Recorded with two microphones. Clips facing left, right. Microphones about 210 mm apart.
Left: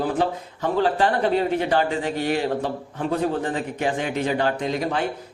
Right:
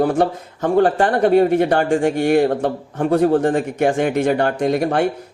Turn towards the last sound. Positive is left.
turn(degrees=-60)  # may be behind; listen again after turning